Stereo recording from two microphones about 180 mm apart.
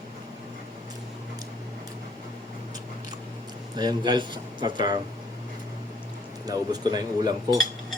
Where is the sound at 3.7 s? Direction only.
25° right (ahead or behind).